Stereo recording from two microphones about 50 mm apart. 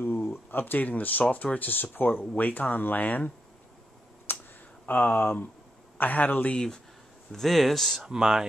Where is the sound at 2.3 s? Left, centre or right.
Left.